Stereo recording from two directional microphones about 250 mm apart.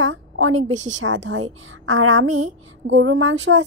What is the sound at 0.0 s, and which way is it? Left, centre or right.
A woman's voice, right.